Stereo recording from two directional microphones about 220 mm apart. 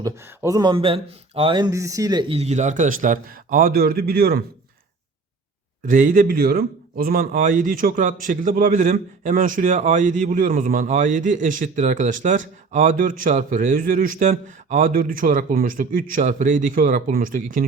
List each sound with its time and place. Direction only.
0.0 s speech: 15° right (ahead or behind); by 4.4 s 45° right (ahead or behind)
5.8 s a man's voice: 35° right (ahead or behind)